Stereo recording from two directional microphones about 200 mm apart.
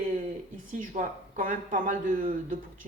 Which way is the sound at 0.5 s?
40° right (ahead or behind).